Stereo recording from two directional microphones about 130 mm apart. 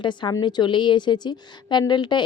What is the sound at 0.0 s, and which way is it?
Speech, 35° left (ahead or behind).